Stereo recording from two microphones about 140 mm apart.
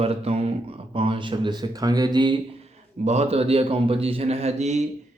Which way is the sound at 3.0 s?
50° right (ahead or behind).